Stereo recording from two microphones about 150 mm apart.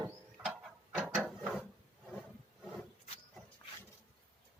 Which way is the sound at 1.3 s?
Centre (ahead or behind).